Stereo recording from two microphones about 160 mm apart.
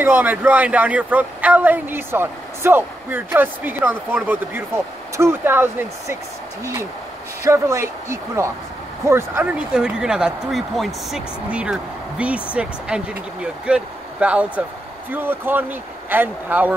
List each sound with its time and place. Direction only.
0.0 s a woman's voice: 10° right (ahead or behind)
7.4 s a woman's voice: 15° right (ahead or behind)